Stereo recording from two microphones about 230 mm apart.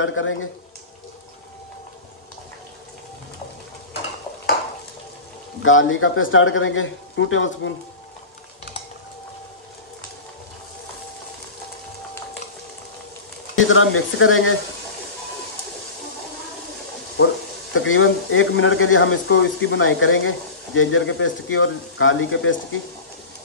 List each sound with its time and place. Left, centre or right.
0.0 s speech: left
5.6 s speech: left
13.6 s speech: left
17.7 s speech: left